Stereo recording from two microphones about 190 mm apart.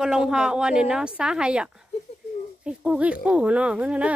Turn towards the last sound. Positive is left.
turn(degrees=-5)  # may be behind; listen again after turning